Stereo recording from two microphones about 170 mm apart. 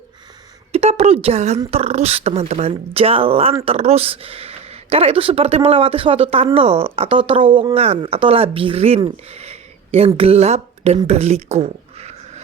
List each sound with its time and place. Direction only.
0.7 s speech: 35° right (ahead or behind)
9.3 s a sound: 40° right (ahead or behind)
10.2 s speech: 40° right (ahead or behind)